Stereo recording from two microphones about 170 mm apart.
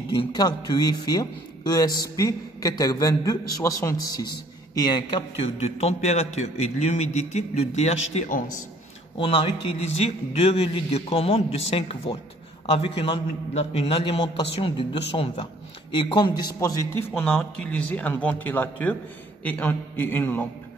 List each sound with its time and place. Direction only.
0.1 s a man's voice: 25° left (ahead or behind); by 8.5 s 45° left (ahead or behind)
9.2 s a man's voice: 30° left (ahead or behind)
17.1 s speech: 5° left (ahead or behind)